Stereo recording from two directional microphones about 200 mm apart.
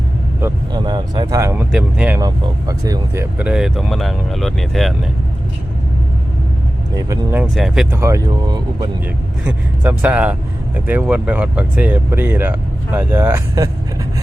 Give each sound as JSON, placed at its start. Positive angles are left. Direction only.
{"t": 0.4, "sound": "speech", "side_deg": -20}
{"t": 2.2, "sound": "speech", "side_deg": -15}
{"t": 6.9, "sound": "speech", "side_deg": -15}
{"t": 7.5, "sound": "speech", "side_deg": 0}
{"t": 7.9, "sound": "speech", "side_deg": -15}
{"t": 9.4, "sound": "speech", "side_deg": -5}